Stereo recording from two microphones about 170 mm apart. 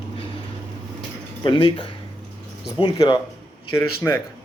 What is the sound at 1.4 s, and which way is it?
Speech, 30° left (ahead or behind).